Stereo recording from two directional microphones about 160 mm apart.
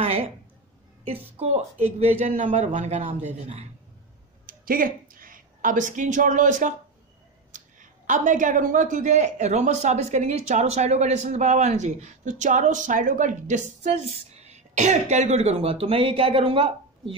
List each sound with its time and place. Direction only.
1.1 s speech: 40° right (ahead or behind)
4.5 s speech: 60° right (ahead or behind)
8.1 s speech: 50° right (ahead or behind); by 16.7 s 35° right (ahead or behind)